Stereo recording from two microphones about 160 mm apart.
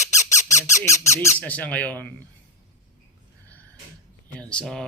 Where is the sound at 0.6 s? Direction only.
20° left (ahead or behind).